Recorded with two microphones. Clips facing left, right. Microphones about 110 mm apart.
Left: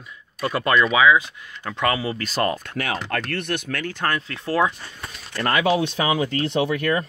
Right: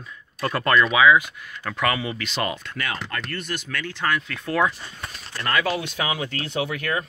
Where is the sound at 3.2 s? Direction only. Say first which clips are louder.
Left 4 dB; 65° left (ahead or behind); by 4.2 s 45° left (ahead or behind).